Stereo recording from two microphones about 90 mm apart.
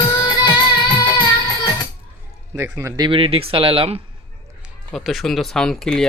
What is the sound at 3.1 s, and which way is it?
Speech, 85° right.